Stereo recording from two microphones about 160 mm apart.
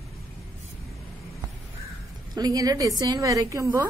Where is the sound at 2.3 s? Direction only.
25° right (ahead or behind).